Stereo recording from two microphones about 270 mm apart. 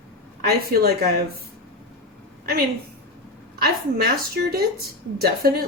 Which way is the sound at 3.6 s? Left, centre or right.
Right.